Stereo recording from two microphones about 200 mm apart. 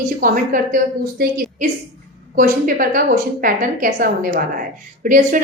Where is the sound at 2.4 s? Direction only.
45° right (ahead or behind).